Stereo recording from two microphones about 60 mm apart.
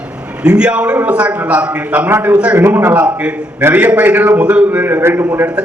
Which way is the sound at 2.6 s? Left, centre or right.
Right.